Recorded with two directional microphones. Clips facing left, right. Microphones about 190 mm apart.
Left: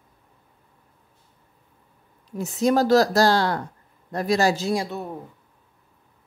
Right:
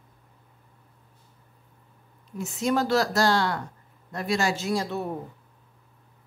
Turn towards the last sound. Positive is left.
turn(degrees=0)  # may be behind; listen again after turning